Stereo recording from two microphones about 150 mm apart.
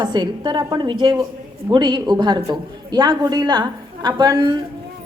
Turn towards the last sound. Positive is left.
turn(degrees=-30)  # may be behind; listen again after turning